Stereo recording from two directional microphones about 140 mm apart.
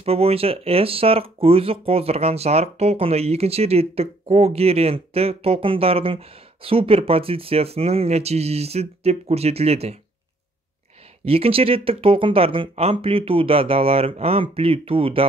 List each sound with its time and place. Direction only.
0.0 s speech: 45° right (ahead or behind)
11.2 s speech: 45° right (ahead or behind)